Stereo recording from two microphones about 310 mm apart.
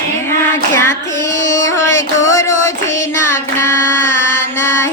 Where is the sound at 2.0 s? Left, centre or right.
Centre.